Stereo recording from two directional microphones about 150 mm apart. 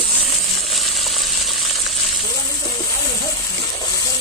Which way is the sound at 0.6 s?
Centre (ahead or behind).